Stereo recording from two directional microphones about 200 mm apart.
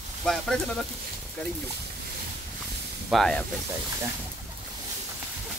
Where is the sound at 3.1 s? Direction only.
Centre (ahead or behind).